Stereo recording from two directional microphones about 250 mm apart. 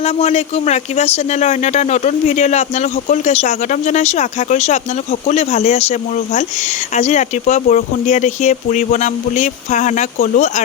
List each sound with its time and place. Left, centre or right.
0.0 s speech: left